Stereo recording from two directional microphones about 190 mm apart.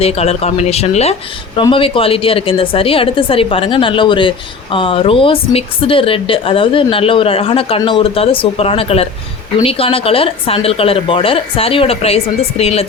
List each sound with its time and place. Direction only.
0.0 s a woman's voice: 30° left (ahead or behind)